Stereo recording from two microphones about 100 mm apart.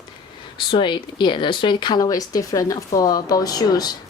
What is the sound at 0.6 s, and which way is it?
Speech, 55° left (ahead or behind).